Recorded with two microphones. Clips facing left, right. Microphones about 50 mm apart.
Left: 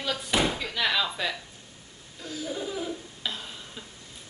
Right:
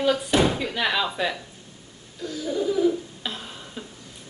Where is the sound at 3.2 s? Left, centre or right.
Centre.